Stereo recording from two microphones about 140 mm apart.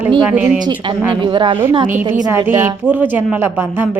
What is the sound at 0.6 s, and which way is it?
Speech, 35° right (ahead or behind).